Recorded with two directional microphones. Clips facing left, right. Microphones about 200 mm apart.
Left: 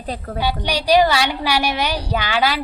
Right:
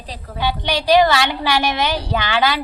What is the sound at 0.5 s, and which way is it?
Speech, 40° left (ahead or behind).